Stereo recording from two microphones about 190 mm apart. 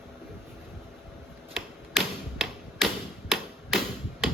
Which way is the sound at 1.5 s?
Centre (ahead or behind).